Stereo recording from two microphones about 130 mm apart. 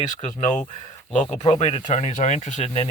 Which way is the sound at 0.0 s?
65° left (ahead or behind).